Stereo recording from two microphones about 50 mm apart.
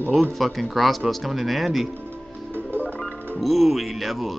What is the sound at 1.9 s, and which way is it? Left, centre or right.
Music, right.